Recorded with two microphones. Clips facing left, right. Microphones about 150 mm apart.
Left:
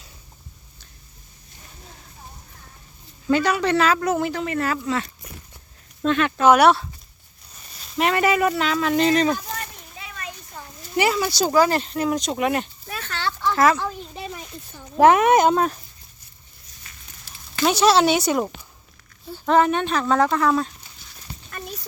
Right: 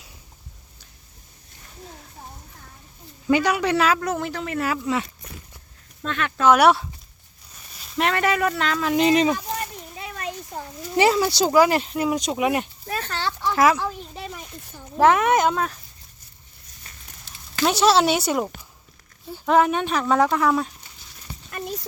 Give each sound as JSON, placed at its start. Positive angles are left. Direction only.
{"t": 3.3, "sound": "speech", "side_deg": -15}
{"t": 4.0, "sound": "speech", "side_deg": 5}
{"t": 6.1, "sound": "speech", "side_deg": 20}
{"t": 6.6, "sound": "speech", "side_deg": -10}
{"t": 7.9, "sound": "speech", "side_deg": 5}
{"t": 9.0, "sound": "speech", "side_deg": -15}
{"t": 10.0, "sound": "a sound", "side_deg": -50}
{"t": 10.9, "sound": "speech", "side_deg": -25}
{"t": 11.5, "sound": "speech", "side_deg": -15}
{"t": 12.9, "sound": "speech", "side_deg": -35}
{"t": 13.4, "sound": "speech", "side_deg": -10}
{"t": 14.9, "sound": "speech", "side_deg": 15}
{"t": 15.5, "sound": "speech", "side_deg": 35}
{"t": 17.2, "sound": "speech", "side_deg": 0}